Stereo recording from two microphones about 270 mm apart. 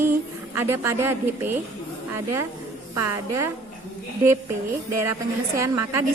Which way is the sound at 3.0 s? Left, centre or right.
Right.